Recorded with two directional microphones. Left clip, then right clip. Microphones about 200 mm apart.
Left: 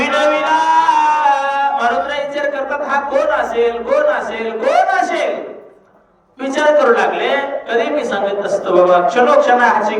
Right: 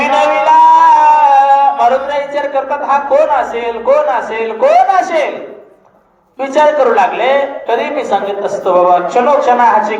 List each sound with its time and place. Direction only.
0.0 s music: 20° right (ahead or behind)
1.8 s a man's voice: 20° right (ahead or behind)
6.5 s a woman's voice: 20° right (ahead or behind)